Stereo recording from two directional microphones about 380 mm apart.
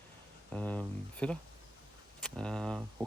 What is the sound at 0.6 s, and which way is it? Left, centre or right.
Speech, centre.